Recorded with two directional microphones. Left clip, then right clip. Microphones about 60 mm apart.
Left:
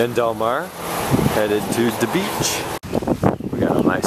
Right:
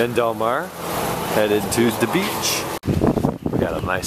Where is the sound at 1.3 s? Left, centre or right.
Centre.